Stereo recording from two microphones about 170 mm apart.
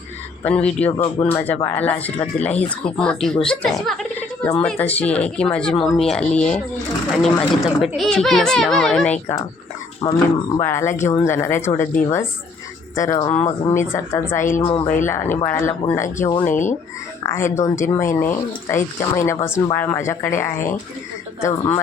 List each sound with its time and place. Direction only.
0.4 s speech: 5° left (ahead or behind)
10.0 s speech: 25° left (ahead or behind)
13.3 s speech: 45° left (ahead or behind)
13.7 s speech: 15° left (ahead or behind)
14.6 s speech: 35° left (ahead or behind)
15.0 s speech: 15° left (ahead or behind)